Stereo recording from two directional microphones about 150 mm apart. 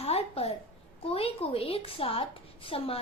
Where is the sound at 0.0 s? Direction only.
45° left (ahead or behind).